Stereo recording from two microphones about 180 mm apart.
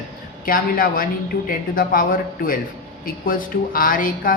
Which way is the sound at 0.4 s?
50° left (ahead or behind).